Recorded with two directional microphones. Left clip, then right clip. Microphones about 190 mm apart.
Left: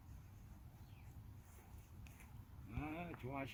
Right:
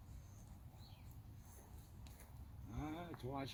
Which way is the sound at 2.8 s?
20° left (ahead or behind).